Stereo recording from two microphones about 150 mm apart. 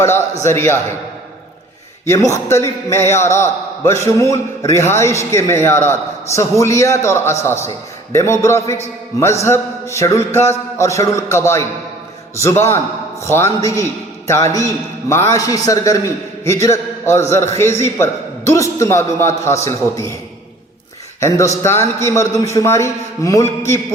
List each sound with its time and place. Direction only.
0.0 s a man's voice: 15° left (ahead or behind)
2.0 s a man's voice: 20° left (ahead or behind)
21.2 s a man's voice: 20° left (ahead or behind)